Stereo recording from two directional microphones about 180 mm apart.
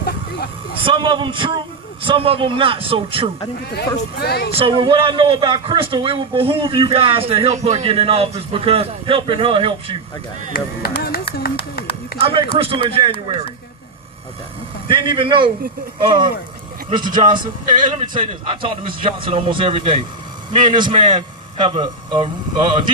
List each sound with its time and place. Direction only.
0.9 s speech: 25° right (ahead or behind)
4.2 s speech: 60° left (ahead or behind)
4.5 s speech: 30° right (ahead or behind)
10.5 s a sound: 60° left (ahead or behind)
12.5 s a man's voice: 30° right (ahead or behind)
14.8 s a man's voice: 25° right (ahead or behind)